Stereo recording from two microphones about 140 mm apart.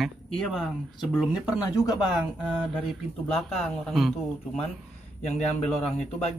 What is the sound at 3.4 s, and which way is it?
Speech, 5° left (ahead or behind).